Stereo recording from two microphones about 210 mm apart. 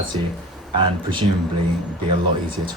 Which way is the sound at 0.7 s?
20° right (ahead or behind).